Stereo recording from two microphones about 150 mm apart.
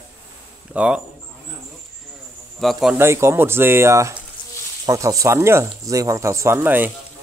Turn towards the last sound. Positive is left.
turn(degrees=-15)  # may be behind; listen again after turning